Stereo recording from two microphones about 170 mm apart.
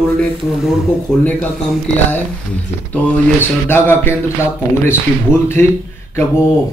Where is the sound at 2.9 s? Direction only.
15° left (ahead or behind).